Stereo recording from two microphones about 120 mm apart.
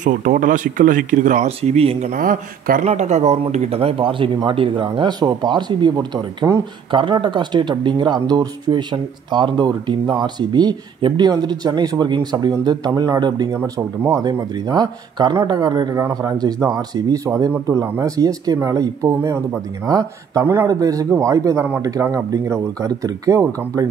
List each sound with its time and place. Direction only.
0.0 s speech: 90° right; by 2.1 s 60° right (ahead or behind)
2.8 s speech: 70° right (ahead or behind); by 6.6 s 30° right (ahead or behind)
6.9 s speech: 45° right (ahead or behind)
13.6 s speech: 15° right (ahead or behind)
14.7 s speech: 35° right (ahead or behind)